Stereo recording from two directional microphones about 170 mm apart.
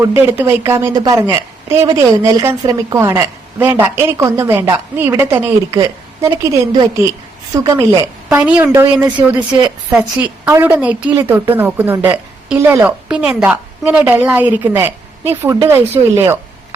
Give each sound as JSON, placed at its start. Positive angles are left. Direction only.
{"t": 0.0, "sound": "a woman's voice", "side_deg": -15}